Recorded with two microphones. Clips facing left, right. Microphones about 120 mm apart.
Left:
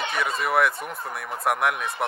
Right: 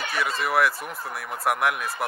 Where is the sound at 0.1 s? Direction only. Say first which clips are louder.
Even; centre (ahead or behind).